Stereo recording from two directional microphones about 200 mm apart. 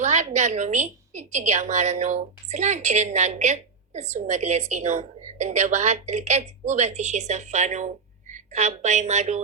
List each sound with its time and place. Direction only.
0.0 s a woman's voice: 35° right (ahead or behind)